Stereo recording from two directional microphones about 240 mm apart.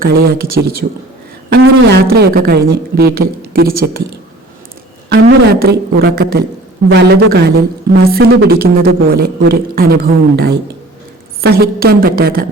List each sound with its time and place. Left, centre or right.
0.0 s a man's voice: right
5.5 s a man's voice: right